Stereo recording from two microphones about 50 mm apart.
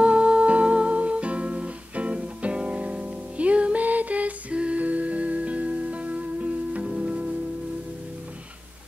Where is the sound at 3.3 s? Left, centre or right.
Right.